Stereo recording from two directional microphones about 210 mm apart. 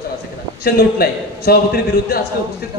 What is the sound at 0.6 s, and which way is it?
Speech, 45° left (ahead or behind).